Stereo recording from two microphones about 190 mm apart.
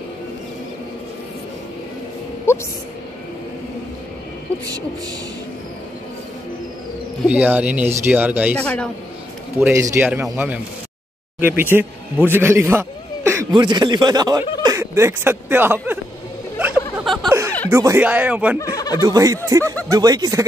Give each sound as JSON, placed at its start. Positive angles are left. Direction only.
{"t": 7.2, "sound": "speech", "side_deg": -10}
{"t": 8.5, "sound": "speech", "side_deg": 5}
{"t": 9.7, "sound": "speech", "side_deg": -15}
{"t": 16.6, "sound": "a sound", "side_deg": -5}
{"t": 17.0, "sound": "chuckle", "side_deg": 0}
{"t": 17.6, "sound": "speech", "side_deg": -15}
{"t": 18.6, "sound": "speech", "side_deg": 20}
{"t": 19.0, "sound": "speech", "side_deg": -20}